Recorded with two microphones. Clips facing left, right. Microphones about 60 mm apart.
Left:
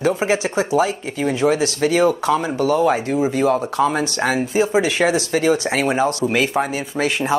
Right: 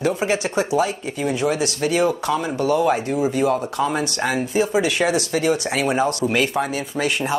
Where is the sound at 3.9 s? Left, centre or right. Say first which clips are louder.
Left 2 dB; left.